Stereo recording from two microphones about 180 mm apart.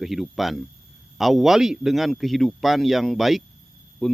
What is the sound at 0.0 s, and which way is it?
A man's voice, centre (ahead or behind).